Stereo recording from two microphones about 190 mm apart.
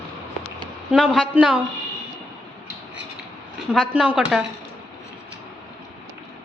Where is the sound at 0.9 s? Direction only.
Centre (ahead or behind).